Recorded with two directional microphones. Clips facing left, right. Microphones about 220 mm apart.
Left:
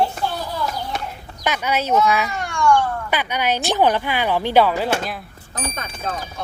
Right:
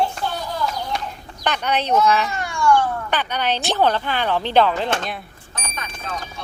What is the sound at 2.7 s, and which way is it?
Speech, 10° left (ahead or behind).